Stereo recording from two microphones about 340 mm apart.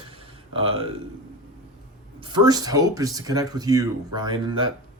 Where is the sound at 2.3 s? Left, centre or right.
Centre.